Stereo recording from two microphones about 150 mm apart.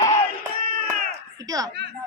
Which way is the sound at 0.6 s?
70° right (ahead or behind).